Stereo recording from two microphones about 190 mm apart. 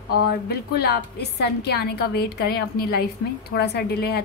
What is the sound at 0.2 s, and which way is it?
A woman's voice, 55° left (ahead or behind).